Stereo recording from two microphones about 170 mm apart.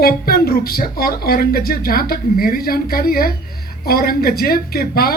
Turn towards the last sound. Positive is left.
turn(degrees=60)  # may be behind; listen again after turning